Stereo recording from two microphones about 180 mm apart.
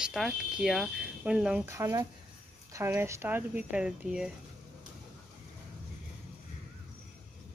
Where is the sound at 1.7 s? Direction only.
15° right (ahead or behind).